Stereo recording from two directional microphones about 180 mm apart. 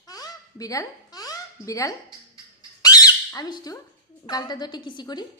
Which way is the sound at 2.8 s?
20° left (ahead or behind).